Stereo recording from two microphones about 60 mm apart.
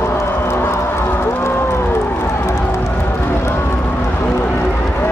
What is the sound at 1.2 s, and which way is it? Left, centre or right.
Run, left.